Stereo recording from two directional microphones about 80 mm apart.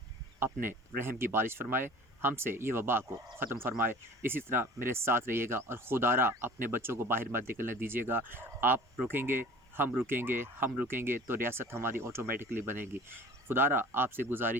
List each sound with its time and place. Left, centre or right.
0.3 s speech: right